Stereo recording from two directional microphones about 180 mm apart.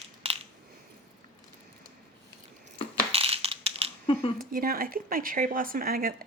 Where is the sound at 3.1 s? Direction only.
35° right (ahead or behind).